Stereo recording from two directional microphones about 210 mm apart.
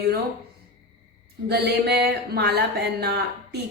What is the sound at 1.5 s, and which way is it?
A woman's voice, 50° right (ahead or behind).